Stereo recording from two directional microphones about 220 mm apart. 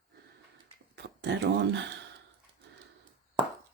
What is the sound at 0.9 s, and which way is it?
Speech, 55° right (ahead or behind).